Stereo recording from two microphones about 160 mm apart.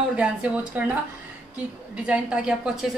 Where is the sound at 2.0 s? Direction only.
5° right (ahead or behind).